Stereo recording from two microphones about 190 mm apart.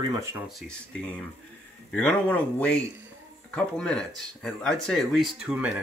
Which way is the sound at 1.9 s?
5° left (ahead or behind).